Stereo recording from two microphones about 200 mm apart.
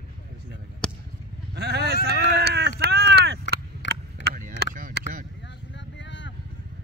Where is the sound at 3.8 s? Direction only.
65° left (ahead or behind).